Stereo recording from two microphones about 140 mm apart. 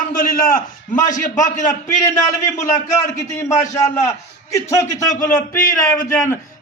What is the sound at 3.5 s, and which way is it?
Speech, 60° left (ahead or behind).